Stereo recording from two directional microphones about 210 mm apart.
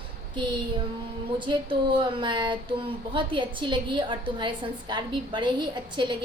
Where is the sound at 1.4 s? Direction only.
25° right (ahead or behind).